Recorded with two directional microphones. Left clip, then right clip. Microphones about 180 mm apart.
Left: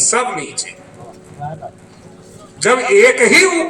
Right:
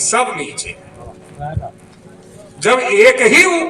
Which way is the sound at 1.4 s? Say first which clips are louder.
Even; 40° right (ahead or behind).